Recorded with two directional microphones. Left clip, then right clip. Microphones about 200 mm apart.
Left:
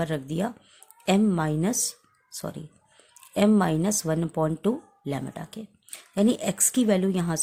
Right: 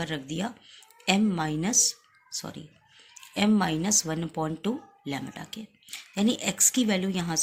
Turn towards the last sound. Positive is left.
turn(degrees=55)  # may be behind; listen again after turning